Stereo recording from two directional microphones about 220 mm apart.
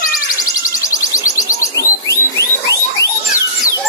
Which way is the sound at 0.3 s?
15° left (ahead or behind).